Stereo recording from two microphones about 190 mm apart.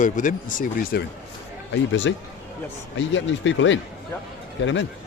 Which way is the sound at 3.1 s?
80° left.